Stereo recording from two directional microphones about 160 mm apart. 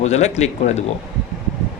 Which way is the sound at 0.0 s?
45° left (ahead or behind).